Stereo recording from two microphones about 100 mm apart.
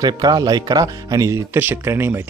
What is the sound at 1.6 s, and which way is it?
Speech, 20° right (ahead or behind).